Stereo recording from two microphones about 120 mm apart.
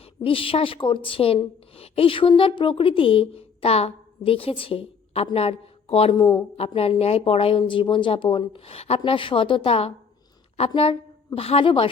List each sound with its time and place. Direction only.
0.0 s a woman's voice: 50° left (ahead or behind)
6.1 s speech: 35° left (ahead or behind)
6.6 s speech: 55° left (ahead or behind)
11.3 s speech: 50° left (ahead or behind)